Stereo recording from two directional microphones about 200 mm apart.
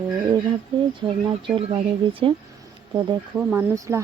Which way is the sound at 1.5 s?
25° right (ahead or behind).